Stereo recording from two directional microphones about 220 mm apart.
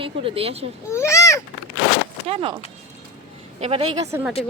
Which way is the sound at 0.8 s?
10° left (ahead or behind).